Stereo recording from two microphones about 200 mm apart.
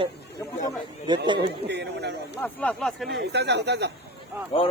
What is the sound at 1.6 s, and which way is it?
Speech, 60° right (ahead or behind).